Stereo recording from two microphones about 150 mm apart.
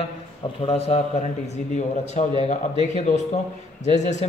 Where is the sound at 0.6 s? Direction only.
40° left (ahead or behind).